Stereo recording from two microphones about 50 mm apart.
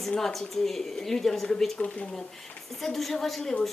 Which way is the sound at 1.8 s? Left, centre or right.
Centre.